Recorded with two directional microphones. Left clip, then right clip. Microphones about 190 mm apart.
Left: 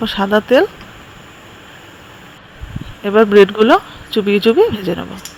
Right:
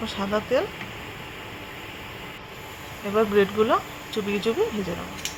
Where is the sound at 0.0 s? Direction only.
35° left (ahead or behind).